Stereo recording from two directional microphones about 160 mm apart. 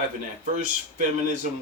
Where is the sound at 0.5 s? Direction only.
50° right (ahead or behind).